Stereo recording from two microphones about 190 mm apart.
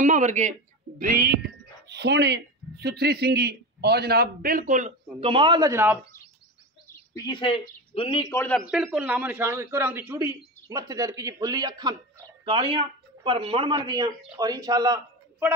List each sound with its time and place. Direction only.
0.0 s speech: 40° right (ahead or behind)
1.9 s speech: 60° right (ahead or behind); by 4.9 s 40° right (ahead or behind)
5.2 s a man's voice: 25° right (ahead or behind)
7.2 s speech: 25° left (ahead or behind)
8.2 s a man's voice: 15° left (ahead or behind)
8.6 s a man's voice: 5° right (ahead or behind)